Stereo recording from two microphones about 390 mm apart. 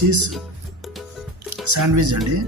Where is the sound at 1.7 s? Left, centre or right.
Right.